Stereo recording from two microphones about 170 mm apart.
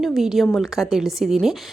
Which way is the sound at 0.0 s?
Centre (ahead or behind).